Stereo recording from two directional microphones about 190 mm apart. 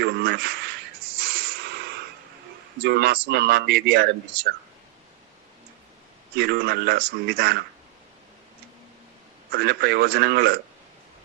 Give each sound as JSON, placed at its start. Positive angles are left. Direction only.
{"t": 0.0, "sound": "a sound", "side_deg": -60}
{"t": 1.2, "sound": "snake", "side_deg": -55}
{"t": 2.8, "sound": "a man's voice", "side_deg": -55}
{"t": 6.3, "sound": "a man's voice", "side_deg": -60}
{"t": 9.5, "sound": "a man's voice", "side_deg": -60}